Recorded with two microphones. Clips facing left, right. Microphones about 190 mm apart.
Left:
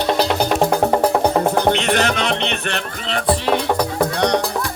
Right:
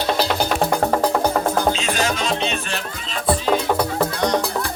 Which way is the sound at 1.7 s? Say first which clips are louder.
Left 4 dB; 65° left (ahead or behind).